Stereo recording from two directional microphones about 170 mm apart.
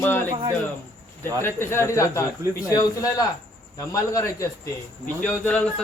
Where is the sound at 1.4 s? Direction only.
15° left (ahead or behind).